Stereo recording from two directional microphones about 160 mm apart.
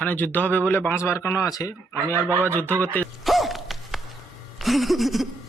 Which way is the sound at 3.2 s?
Centre (ahead or behind).